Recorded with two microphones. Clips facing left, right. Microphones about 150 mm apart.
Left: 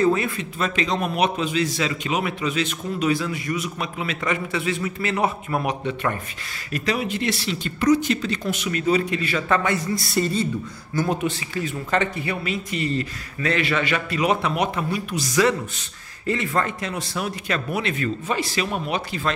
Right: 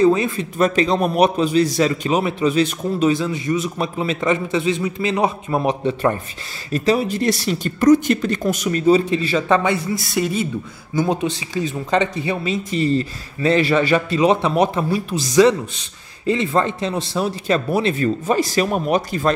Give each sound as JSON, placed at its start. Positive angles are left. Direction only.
{"t": 0.0, "sound": "speech", "side_deg": -20}
{"t": 0.4, "sound": "speech", "side_deg": -40}
{"t": 3.1, "sound": "speech", "side_deg": -25}
{"t": 9.9, "sound": "speech", "side_deg": 0}
{"t": 11.0, "sound": "speech", "side_deg": -20}